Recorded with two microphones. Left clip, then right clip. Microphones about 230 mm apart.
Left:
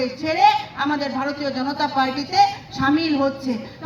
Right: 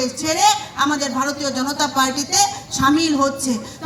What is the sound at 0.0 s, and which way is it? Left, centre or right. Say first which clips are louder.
A woman's voice: even; right.